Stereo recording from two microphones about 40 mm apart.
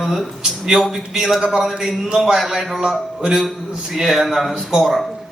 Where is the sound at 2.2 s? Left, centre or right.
Centre.